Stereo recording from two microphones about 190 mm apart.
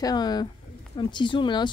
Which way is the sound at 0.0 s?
20° left (ahead or behind).